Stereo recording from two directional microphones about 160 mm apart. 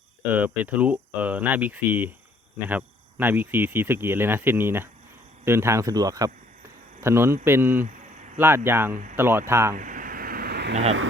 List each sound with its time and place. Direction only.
0.3 s speech: 10° right (ahead or behind)
9.7 s vehicle: 55° right (ahead or behind); by 10.8 s 90° right